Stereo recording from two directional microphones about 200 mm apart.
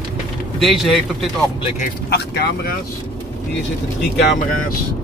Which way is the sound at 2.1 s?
55° left (ahead or behind).